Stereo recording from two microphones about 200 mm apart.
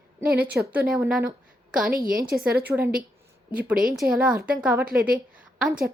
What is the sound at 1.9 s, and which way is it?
Speech, 45° right (ahead or behind).